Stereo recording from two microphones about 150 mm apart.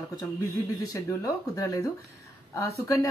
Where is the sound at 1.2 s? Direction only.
20° left (ahead or behind).